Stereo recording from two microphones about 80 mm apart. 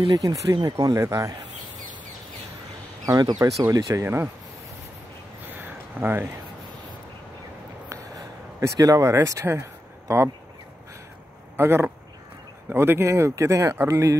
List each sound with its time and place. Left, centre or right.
0.1 s speech: right
0.9 s speech: right
3.1 s speech: right
3.9 s speech: right
5.5 s a sound: right
7.9 s a sound: right
11.5 s speech: right